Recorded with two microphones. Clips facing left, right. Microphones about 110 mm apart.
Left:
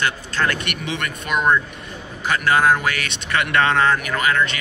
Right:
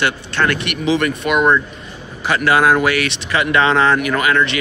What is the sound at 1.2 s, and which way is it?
Speech, 55° right (ahead or behind).